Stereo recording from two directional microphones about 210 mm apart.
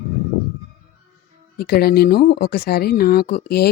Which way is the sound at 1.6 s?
45° left (ahead or behind).